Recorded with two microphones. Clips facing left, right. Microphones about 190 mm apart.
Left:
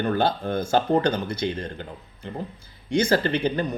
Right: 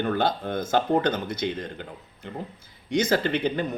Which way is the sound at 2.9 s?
20° right (ahead or behind).